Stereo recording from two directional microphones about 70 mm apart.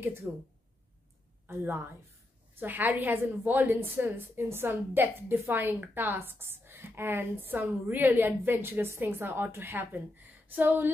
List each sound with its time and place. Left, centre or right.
0.3 s speech: right
1.5 s a woman's voice: right